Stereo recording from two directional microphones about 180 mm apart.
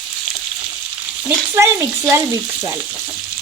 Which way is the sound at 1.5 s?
15° right (ahead or behind).